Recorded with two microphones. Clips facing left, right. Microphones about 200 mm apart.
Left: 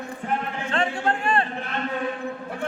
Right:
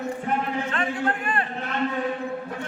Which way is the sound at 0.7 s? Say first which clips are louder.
Left 6 dB; 30° left (ahead or behind).